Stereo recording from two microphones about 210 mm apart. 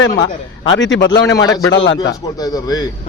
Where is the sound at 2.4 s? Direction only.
20° left (ahead or behind).